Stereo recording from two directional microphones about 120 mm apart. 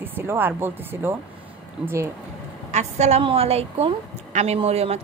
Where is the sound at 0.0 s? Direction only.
15° right (ahead or behind).